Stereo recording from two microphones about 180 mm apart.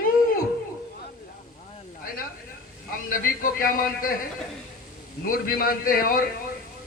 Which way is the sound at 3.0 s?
50° left (ahead or behind).